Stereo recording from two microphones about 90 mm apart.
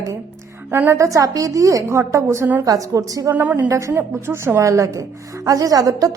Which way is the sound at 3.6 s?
35° right (ahead or behind).